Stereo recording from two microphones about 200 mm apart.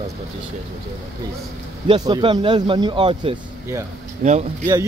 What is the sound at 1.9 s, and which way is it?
Speech, 25° right (ahead or behind).